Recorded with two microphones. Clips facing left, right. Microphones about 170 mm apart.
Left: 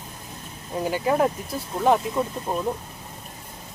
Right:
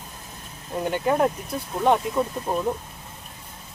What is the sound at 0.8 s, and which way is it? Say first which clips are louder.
Speech: even; centre (ahead or behind).